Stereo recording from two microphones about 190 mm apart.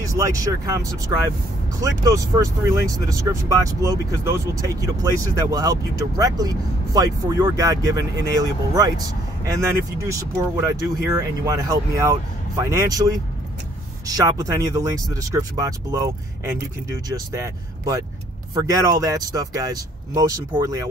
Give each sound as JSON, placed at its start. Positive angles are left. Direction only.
{"t": 0.0, "sound": "speech", "side_deg": -15}